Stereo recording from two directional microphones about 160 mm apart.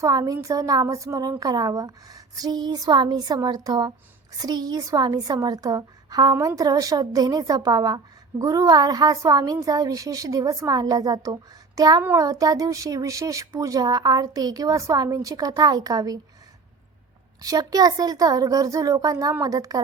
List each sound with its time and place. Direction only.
0.0 s a woman's voice: 20° right (ahead or behind)
17.4 s a woman's voice: 25° right (ahead or behind)